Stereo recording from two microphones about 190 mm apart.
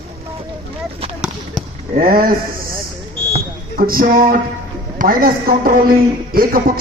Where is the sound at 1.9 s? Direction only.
50° right (ahead or behind).